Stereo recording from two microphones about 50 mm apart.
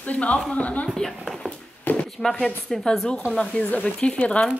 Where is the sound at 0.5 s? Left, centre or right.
Left.